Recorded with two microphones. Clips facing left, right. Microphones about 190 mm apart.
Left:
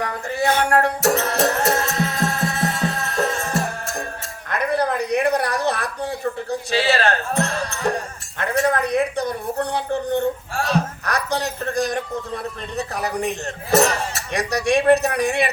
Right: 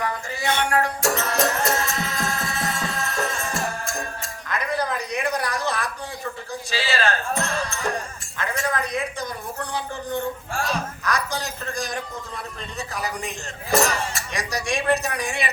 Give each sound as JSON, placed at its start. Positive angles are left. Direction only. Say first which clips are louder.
{"t": 0.0, "sound": "a woman's voice", "louder": "left 3 dB", "side_deg": 60}
{"t": 0.4, "sound": "a sound", "louder": "left 4 dB", "side_deg": 40}
{"t": 0.7, "sound": "a woman's voice", "louder": "left 4 dB", "side_deg": 65}
{"t": 1.4, "sound": "music", "louder": "left 3 dB", "side_deg": 60}
{"t": 4.4, "sound": "a sound", "louder": "left 5 dB", "side_deg": 60}
{"t": 8.4, "sound": "a woman's voice", "louder": "left 6 dB", "side_deg": 60}